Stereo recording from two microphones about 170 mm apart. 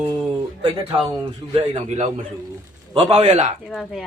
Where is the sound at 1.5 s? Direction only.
40° right (ahead or behind).